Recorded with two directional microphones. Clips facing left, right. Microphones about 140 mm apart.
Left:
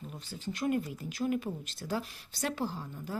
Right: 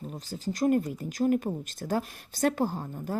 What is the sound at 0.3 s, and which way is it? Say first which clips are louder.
A woman's voice: right 7 dB; 40° right (ahead or behind).